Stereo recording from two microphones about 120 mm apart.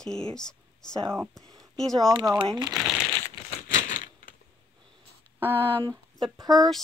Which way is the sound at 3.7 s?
90° left.